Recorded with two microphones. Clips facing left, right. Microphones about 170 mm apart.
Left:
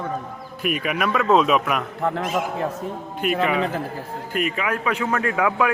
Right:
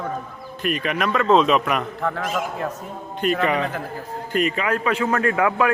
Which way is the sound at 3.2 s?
5° left (ahead or behind).